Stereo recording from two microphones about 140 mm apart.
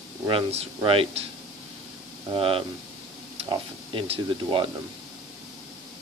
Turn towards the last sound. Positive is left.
turn(degrees=-40)  # may be behind; listen again after turning